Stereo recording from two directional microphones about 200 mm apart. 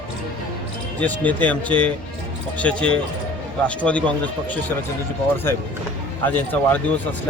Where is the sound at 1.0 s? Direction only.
10° left (ahead or behind).